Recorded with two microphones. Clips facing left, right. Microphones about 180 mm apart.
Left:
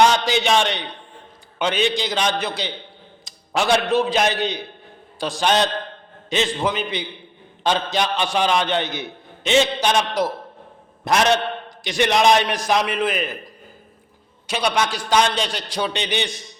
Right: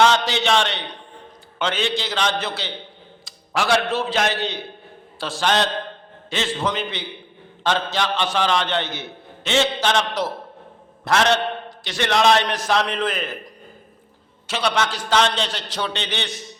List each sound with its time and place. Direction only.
0.0 s a man's voice: 15° left (ahead or behind)
14.4 s a man's voice: 15° left (ahead or behind)